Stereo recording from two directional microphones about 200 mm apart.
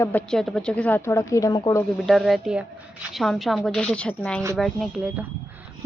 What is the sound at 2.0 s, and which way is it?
Speech, centre (ahead or behind).